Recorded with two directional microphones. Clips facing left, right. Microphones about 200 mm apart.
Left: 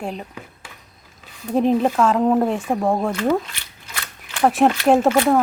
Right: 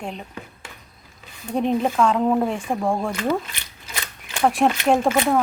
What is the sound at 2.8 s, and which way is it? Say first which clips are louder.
Speech: left 3 dB; 20° left (ahead or behind).